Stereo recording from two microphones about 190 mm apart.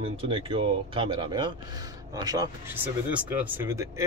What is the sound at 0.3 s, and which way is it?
Speech, 25° right (ahead or behind).